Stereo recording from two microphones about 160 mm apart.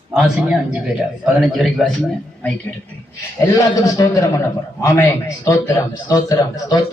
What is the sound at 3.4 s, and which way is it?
A man's voice, 20° left (ahead or behind).